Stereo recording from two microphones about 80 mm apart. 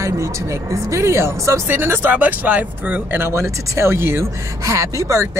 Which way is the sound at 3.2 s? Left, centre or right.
Right.